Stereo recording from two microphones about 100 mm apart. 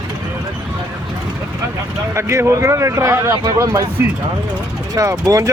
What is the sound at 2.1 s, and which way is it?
A man's voice, 25° right (ahead or behind).